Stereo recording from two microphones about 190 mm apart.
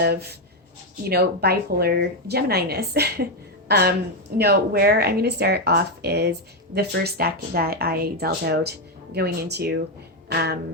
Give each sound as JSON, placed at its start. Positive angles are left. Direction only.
{"t": 0.0, "sound": "a woman's voice", "side_deg": -55}